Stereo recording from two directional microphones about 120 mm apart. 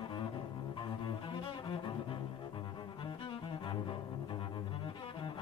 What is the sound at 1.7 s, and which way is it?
Cello, 45° left (ahead or behind).